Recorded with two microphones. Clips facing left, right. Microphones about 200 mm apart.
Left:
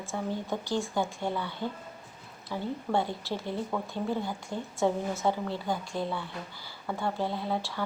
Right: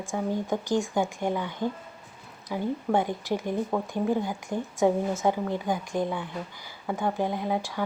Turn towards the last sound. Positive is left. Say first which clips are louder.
# right 3 dB
turn(degrees=-15)  # may be behind; listen again after turning